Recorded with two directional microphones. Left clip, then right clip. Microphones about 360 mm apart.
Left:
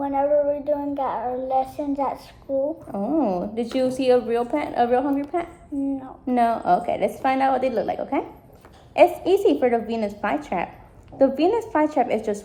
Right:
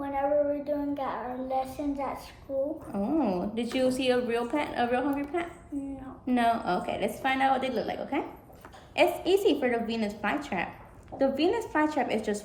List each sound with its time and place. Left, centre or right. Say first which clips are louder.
0.0 s child singing: left 7 dB; left
2.9 s a woman's voice: left 5 dB; centre